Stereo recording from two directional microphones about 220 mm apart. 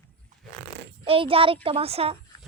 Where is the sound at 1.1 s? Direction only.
25° right (ahead or behind).